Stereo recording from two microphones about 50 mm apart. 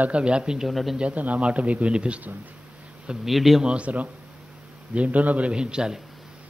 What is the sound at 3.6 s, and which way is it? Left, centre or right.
A man's voice, right.